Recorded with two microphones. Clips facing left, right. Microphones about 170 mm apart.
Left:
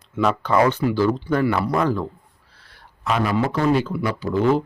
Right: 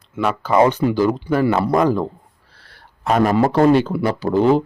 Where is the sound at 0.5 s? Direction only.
25° right (ahead or behind).